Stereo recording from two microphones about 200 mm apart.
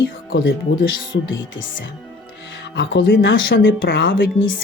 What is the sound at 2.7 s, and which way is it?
Speech, 65° left (ahead or behind).